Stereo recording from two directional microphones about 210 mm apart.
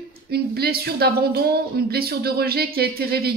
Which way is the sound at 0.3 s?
50° right (ahead or behind).